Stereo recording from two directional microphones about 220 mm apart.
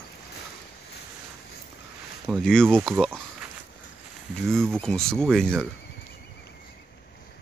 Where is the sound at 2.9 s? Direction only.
10° right (ahead or behind).